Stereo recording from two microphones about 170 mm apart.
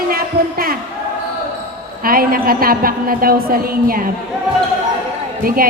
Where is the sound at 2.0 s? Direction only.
60° right (ahead or behind).